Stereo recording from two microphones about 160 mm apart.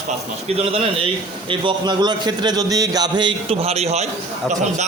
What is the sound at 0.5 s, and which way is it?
A man's voice, 35° right (ahead or behind).